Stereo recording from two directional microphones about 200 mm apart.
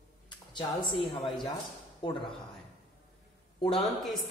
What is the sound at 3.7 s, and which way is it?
Speech, centre (ahead or behind).